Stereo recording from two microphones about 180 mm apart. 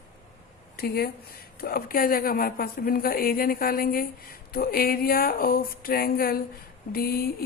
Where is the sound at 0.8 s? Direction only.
60° left (ahead or behind).